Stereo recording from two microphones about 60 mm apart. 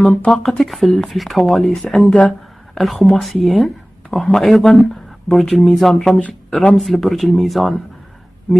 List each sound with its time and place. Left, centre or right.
0.1 s speech: centre
0.5 s speech: centre
2.1 s a sound: left
2.8 s speech: centre